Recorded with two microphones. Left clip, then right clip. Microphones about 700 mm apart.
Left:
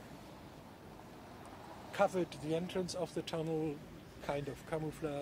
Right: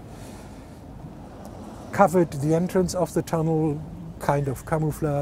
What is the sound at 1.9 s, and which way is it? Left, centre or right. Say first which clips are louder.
Speech: right 14 dB; right.